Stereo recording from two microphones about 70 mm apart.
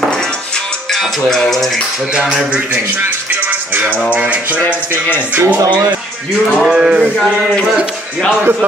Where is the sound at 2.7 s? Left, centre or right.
Right.